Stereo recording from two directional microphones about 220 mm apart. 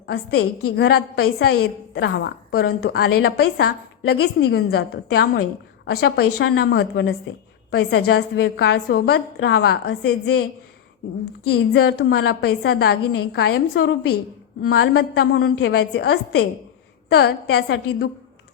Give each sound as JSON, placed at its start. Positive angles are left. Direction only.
{"t": 0.1, "sound": "a woman's voice", "side_deg": 45}
{"t": 11.5, "sound": "a woman's voice", "side_deg": 50}